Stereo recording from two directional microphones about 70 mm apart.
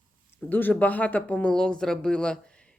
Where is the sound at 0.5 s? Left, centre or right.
Left.